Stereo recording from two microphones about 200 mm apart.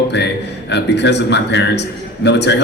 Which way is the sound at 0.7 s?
60° left (ahead or behind).